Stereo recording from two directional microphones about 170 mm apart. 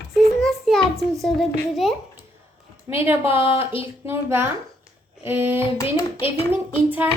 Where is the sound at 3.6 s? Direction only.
35° left (ahead or behind).